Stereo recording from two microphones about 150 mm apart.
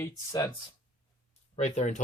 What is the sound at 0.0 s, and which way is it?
Speech, 20° left (ahead or behind).